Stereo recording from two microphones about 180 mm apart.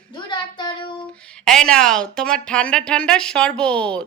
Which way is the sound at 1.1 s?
5° left (ahead or behind).